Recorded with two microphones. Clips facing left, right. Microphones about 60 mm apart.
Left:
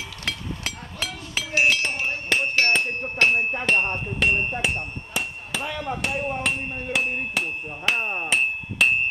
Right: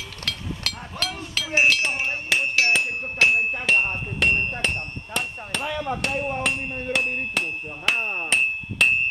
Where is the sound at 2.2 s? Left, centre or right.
Centre.